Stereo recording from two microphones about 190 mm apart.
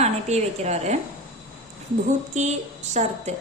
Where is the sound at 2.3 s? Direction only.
35° right (ahead or behind).